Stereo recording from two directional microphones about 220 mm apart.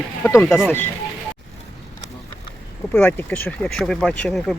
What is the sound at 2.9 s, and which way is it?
Speech, 10° left (ahead or behind).